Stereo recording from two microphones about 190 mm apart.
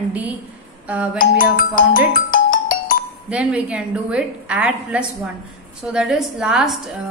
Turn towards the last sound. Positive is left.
turn(degrees=-5)  # may be behind; listen again after turning